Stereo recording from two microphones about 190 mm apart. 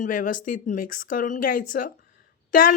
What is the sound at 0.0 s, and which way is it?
Speech, 45° left (ahead or behind).